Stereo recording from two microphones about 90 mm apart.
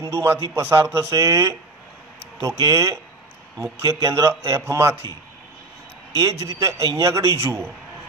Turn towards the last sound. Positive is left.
turn(degrees=-30)  # may be behind; listen again after turning